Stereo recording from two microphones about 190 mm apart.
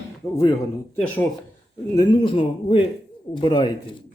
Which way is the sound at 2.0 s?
25° left (ahead or behind).